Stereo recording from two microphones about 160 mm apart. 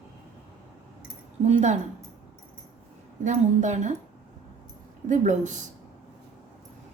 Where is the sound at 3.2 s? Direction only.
50° right (ahead or behind).